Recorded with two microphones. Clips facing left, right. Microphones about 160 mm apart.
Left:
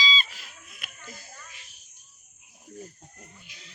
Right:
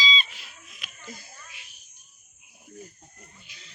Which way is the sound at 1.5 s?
40° left (ahead or behind).